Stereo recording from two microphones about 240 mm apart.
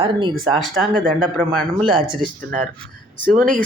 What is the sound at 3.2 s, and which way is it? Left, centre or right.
Speech, right.